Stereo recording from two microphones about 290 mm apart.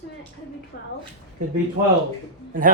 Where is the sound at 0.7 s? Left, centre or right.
Left.